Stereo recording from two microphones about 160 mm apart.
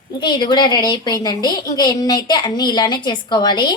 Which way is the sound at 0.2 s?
30° left (ahead or behind).